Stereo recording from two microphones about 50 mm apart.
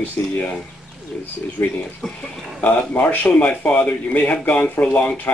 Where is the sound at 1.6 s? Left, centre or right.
Left.